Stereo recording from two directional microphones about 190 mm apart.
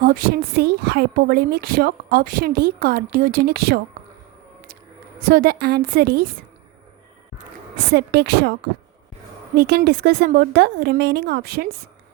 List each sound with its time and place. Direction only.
0.0 s a woman's voice: 50° right (ahead or behind)
5.2 s speech: 50° right (ahead or behind)
7.9 s speech: 60° right (ahead or behind)
9.6 s speech: 60° right (ahead or behind)